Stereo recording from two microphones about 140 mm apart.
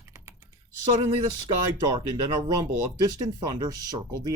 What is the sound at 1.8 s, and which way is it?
Speech, 25° right (ahead or behind).